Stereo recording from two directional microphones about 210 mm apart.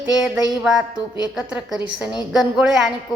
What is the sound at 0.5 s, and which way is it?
A woman's voice, 5° right (ahead or behind).